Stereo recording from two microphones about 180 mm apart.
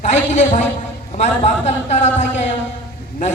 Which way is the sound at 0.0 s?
40° left (ahead or behind).